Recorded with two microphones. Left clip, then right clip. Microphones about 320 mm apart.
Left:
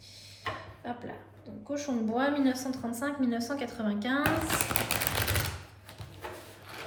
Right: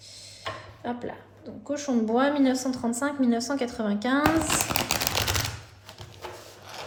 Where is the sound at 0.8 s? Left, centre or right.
Right.